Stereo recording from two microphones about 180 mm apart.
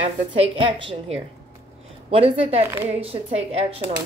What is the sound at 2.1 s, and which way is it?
Speech, 30° right (ahead or behind).